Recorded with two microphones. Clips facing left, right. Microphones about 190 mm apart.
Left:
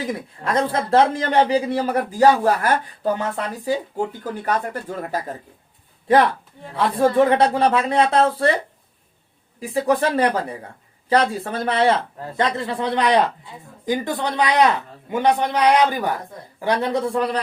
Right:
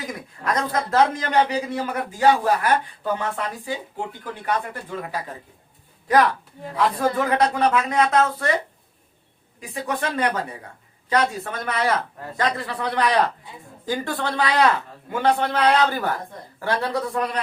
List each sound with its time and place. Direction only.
0.0 s a man's voice: 30° left (ahead or behind)
6.7 s a man's voice: 30° left (ahead or behind)
9.6 s a man's voice: 35° left (ahead or behind)